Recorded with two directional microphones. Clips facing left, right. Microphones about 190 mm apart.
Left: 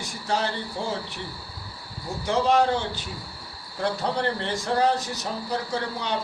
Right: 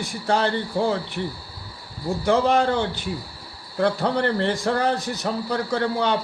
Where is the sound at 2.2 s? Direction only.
55° right (ahead or behind).